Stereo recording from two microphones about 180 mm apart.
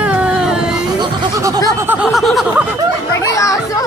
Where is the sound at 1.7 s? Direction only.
10° right (ahead or behind).